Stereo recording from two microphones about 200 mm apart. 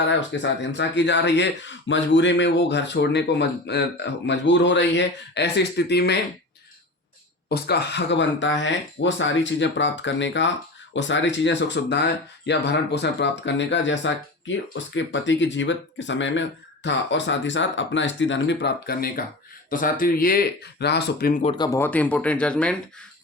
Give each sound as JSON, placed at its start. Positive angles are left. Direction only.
{"t": 0.1, "sound": "speech", "side_deg": 65}
{"t": 7.5, "sound": "speech", "side_deg": 60}
{"t": 21.4, "sound": "speech", "side_deg": 20}